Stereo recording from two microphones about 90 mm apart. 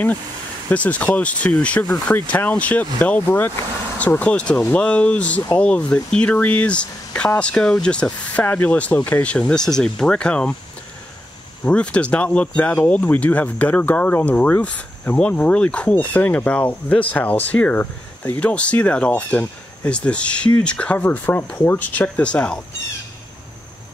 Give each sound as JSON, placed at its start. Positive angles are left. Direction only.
{"t": 0.7, "sound": "speech", "side_deg": 15}
{"t": 11.6, "sound": "speech", "side_deg": 15}